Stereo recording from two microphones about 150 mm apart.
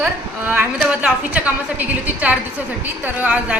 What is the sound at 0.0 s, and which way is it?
A woman's voice, 10° right (ahead or behind).